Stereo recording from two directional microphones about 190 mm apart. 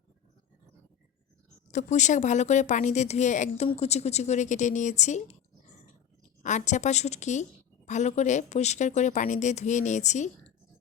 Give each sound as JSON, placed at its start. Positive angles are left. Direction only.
{"t": 1.7, "sound": "speech", "side_deg": 40}
{"t": 6.4, "sound": "speech", "side_deg": 40}